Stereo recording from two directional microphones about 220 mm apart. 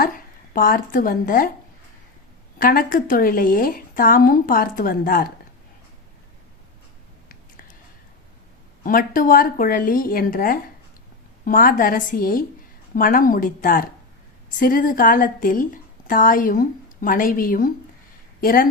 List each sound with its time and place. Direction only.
0.0 s speech: 40° left (ahead or behind)
2.6 s a woman's voice: 40° left (ahead or behind)
8.8 s a woman's voice: 40° left (ahead or behind)